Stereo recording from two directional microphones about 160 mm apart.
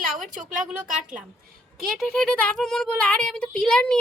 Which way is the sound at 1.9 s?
Centre (ahead or behind).